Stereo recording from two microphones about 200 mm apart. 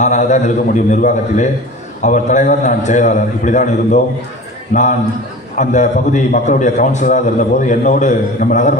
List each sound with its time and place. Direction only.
0.0 s a man's voice: 35° left (ahead or behind)